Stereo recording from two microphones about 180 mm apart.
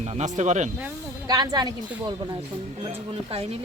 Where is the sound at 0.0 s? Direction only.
40° right (ahead or behind).